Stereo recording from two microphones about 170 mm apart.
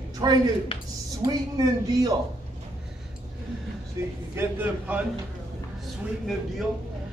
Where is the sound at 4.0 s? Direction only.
20° right (ahead or behind).